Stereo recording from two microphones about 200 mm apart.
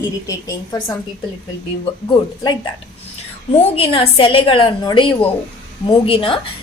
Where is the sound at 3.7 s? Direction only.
30° left (ahead or behind).